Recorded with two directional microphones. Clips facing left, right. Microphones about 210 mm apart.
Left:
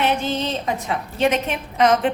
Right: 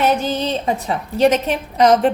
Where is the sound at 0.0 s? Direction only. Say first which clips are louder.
Right 3 dB; 40° right (ahead or behind).